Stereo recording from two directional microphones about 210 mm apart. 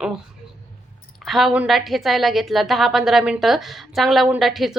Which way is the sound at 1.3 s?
Centre (ahead or behind).